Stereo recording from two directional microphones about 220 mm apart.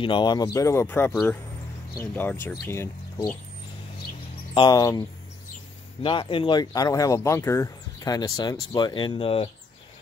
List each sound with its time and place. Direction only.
0.0 s speech: 20° left (ahead or behind)
4.6 s speech: 15° left (ahead or behind)
6.0 s speech: 25° left (ahead or behind)